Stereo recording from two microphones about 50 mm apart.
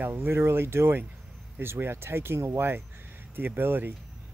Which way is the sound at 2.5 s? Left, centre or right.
Right.